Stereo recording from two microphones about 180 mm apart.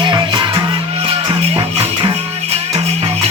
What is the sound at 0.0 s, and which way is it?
Music, 25° right (ahead or behind).